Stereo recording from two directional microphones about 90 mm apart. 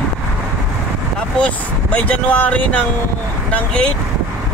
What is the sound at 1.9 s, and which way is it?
Speech, 15° left (ahead or behind).